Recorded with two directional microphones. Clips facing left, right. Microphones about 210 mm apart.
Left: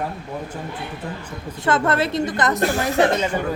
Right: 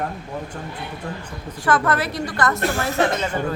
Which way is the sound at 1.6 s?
25° left (ahead or behind).